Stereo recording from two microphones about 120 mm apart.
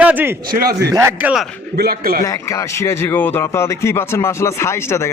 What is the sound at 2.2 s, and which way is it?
Speech, 25° left (ahead or behind).